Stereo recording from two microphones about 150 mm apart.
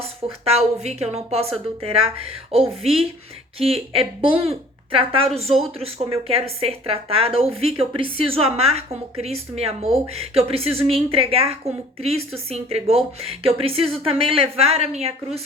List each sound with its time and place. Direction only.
0.0 s a woman's voice: 40° right (ahead or behind)